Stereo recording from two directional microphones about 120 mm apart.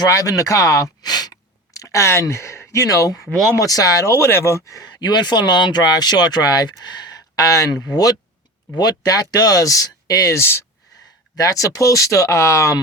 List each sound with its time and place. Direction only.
0.0 s speech: 30° left (ahead or behind)
3.2 s speech: 5° left (ahead or behind)
3.6 s speech: 30° left (ahead or behind)